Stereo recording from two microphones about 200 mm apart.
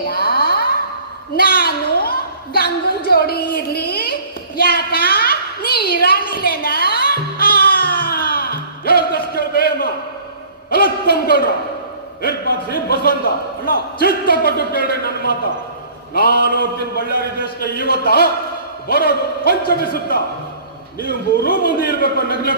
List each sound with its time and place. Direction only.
0.1 s music: 50° left (ahead or behind)
1.3 s a sound: 50° left (ahead or behind)
7.3 s music: 50° left (ahead or behind)
10.7 s a sound: 50° left (ahead or behind)
12.2 s a man's voice: 50° left (ahead or behind)
16.9 s a man's voice: 50° left (ahead or behind)